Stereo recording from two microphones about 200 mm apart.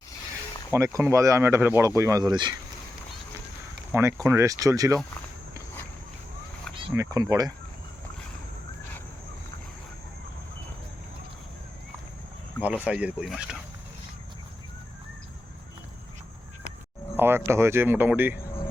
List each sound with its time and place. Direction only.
0.7 s speech: 15° right (ahead or behind)
3.9 s speech: 15° right (ahead or behind)
6.9 s speech: 15° right (ahead or behind)
12.6 s speech: 5° right (ahead or behind)
17.2 s speech: 10° right (ahead or behind)